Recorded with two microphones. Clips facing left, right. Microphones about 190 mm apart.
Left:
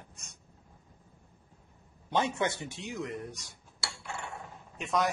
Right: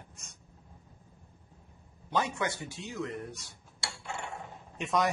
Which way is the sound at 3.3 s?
15° left (ahead or behind).